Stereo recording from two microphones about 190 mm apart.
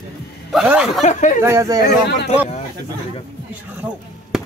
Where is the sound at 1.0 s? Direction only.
40° left (ahead or behind).